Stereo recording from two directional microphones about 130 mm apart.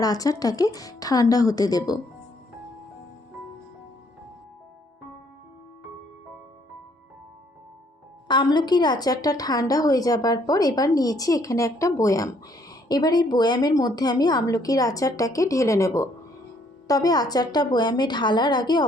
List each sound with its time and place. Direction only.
0.0 s a woman's voice: 30° left (ahead or behind)
8.3 s a woman's voice: 35° left (ahead or behind)